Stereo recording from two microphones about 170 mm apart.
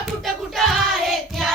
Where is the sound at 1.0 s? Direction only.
Centre (ahead or behind).